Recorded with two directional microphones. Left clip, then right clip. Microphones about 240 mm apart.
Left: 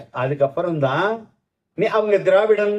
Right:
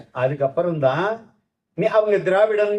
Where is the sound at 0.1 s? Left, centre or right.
Left.